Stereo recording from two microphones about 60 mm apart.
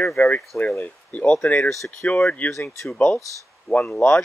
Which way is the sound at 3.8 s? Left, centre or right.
Centre.